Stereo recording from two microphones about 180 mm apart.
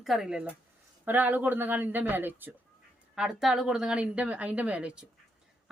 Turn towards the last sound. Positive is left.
turn(degrees=-5)  # may be behind; listen again after turning